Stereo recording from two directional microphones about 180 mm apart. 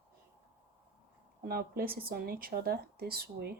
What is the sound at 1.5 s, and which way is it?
Speech, 55° right (ahead or behind).